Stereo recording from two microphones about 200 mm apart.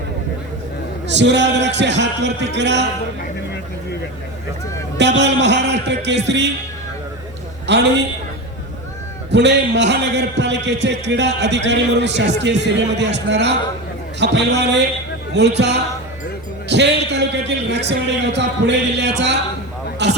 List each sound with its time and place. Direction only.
1.0 s a man's voice: 60° right (ahead or behind)
4.9 s a man's voice: 60° right (ahead or behind)
7.7 s a man's voice: 60° right (ahead or behind)
9.3 s a man's voice: 60° right (ahead or behind)